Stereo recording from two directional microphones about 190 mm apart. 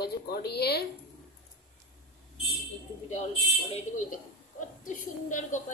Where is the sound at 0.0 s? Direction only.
55° left (ahead or behind).